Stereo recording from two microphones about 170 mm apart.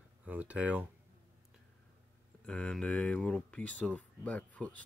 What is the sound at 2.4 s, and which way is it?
Speech, 5° left (ahead or behind).